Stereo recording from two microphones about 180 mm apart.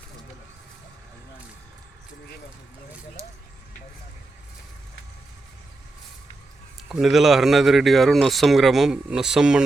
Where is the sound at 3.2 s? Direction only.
15° right (ahead or behind).